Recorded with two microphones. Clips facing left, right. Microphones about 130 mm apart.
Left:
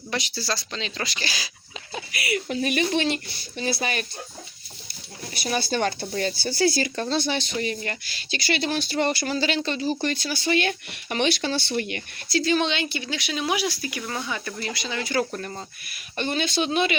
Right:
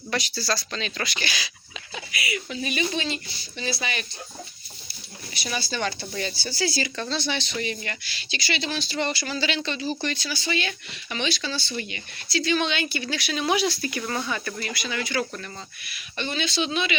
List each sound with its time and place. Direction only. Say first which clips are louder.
0.1 s speech: right 1 dB; 25° left (ahead or behind)
2.1 s speech: left 5 dB; 55° left (ahead or behind)
5.3 s speech: left 5 dB; 50° left (ahead or behind); by 14.7 s 15° left (ahead or behind)
14.7 s speech: left 2 dB; 30° left (ahead or behind); by 17.0 s 50° left (ahead or behind)